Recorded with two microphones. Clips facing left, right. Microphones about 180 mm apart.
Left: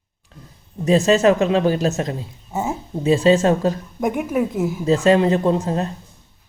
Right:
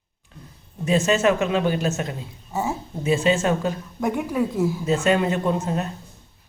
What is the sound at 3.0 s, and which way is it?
Speech, 35° left (ahead or behind).